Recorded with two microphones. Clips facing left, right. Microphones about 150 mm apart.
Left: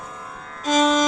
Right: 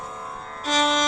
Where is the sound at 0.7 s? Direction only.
40° left (ahead or behind).